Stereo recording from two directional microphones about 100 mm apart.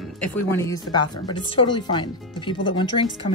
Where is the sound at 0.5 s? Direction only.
30° left (ahead or behind).